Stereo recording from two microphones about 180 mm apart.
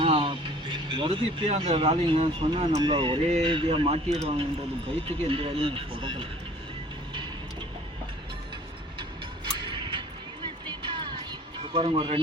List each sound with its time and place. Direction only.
0.0 s speech: 30° right (ahead or behind)
9.0 s music: 25° right (ahead or behind)